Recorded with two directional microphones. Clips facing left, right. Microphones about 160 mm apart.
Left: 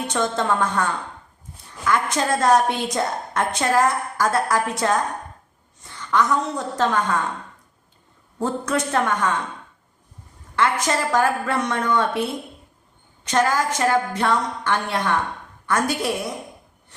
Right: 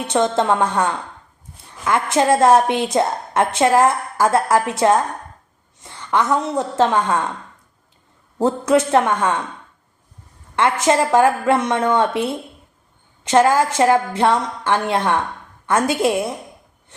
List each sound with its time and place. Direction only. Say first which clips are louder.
0.1 s a woman's voice: right 6 dB; 25° right (ahead or behind)
5.8 s a sound: right 1 dB; 25° right (ahead or behind)
6.7 s a woman's voice: right 4 dB; 25° right (ahead or behind)
8.4 s a woman's voice: right 7 dB; 25° right (ahead or behind)
10.5 s a woman's voice: right 5 dB; 25° right (ahead or behind)
13.2 s a woman's voice: right 6 dB; 25° right (ahead or behind)